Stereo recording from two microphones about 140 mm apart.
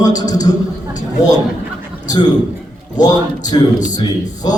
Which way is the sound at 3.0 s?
25° left (ahead or behind).